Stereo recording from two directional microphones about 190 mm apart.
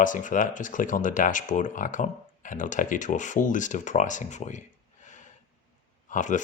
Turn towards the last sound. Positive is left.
turn(degrees=40)  # may be behind; listen again after turning